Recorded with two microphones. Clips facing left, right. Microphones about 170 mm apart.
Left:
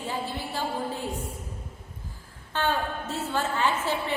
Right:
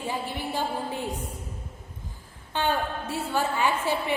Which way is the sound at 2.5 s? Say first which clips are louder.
Right 1 dB; 15° right (ahead or behind).